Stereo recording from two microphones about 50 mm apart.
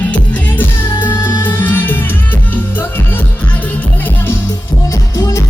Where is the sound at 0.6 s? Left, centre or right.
Left.